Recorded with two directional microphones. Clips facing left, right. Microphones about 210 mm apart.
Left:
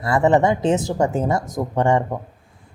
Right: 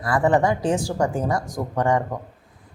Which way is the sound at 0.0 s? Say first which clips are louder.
Left 3 dB; 25° left (ahead or behind).